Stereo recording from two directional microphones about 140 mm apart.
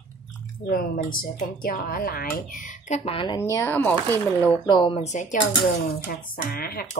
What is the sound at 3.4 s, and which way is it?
Speech, 20° left (ahead or behind).